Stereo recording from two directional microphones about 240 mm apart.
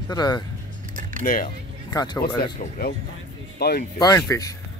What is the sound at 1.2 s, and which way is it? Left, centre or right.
Speech, left.